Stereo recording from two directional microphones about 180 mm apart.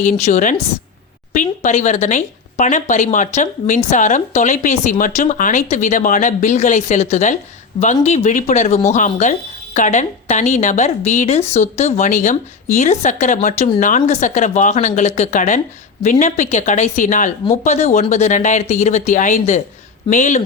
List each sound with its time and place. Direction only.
0.0 s speech: 40° left (ahead or behind)